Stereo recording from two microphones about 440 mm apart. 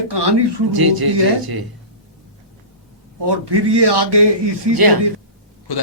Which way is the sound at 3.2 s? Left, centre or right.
Right.